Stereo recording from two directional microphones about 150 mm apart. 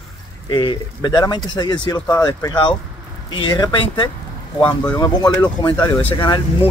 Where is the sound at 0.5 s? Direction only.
30° left (ahead or behind).